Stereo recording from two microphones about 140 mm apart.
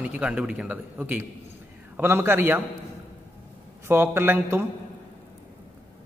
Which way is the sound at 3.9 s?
15° right (ahead or behind).